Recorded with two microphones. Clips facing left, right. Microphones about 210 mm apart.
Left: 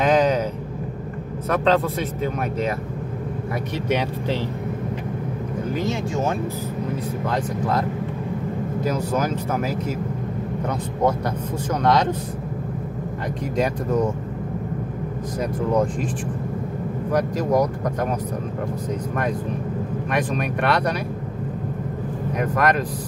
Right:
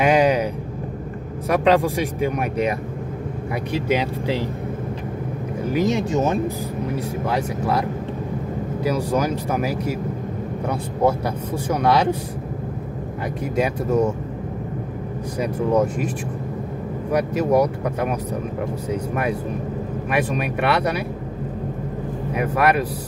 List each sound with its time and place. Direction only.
0.0 s vehicle: 10° right (ahead or behind)
1.5 s speech: 15° right (ahead or behind)
5.7 s speech: 15° right (ahead or behind)
7.2 s speech: 10° right (ahead or behind)
8.8 s speech: 10° right (ahead or behind)
13.6 s speech: 10° right (ahead or behind)
15.7 s speech: 10° right (ahead or behind)
17.1 s speech: 10° right (ahead or behind)
22.3 s speech: 10° right (ahead or behind)